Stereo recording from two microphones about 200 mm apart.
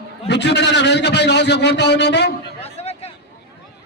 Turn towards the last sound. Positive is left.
turn(degrees=30)  # may be behind; listen again after turning